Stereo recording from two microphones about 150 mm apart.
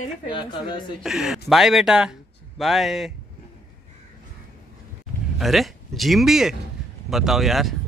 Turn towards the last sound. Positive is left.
turn(degrees=0)  # may be behind; listen again after turning